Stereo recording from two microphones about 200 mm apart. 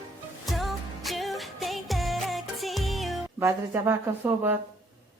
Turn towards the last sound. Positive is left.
turn(degrees=-10)  # may be behind; listen again after turning